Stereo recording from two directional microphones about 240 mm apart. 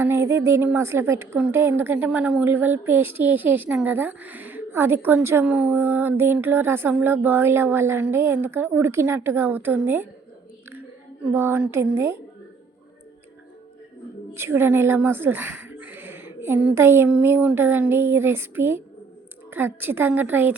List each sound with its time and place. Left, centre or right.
0.0 s a woman's voice: centre
11.2 s a woman's voice: centre
14.3 s a woman's voice: centre